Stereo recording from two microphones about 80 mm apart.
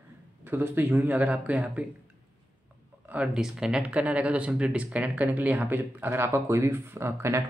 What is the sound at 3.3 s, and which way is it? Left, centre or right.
Speech, centre.